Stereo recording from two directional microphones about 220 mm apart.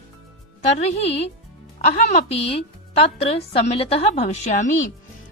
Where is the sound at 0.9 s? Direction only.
30° left (ahead or behind).